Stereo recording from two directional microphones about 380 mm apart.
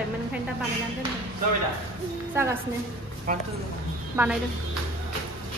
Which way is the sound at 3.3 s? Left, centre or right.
Right.